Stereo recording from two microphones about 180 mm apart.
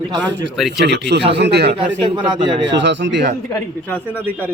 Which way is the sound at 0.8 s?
70° right (ahead or behind).